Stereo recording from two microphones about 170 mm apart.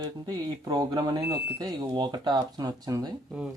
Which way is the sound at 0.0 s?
20° right (ahead or behind).